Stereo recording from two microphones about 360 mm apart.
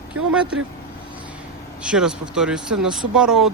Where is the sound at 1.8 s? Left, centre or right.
Centre.